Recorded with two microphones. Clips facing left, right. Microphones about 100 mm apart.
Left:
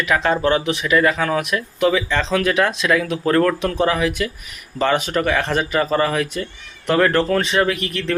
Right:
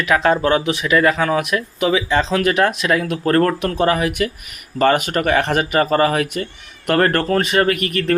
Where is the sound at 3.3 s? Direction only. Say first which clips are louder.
Right 1 dB; 45° right (ahead or behind).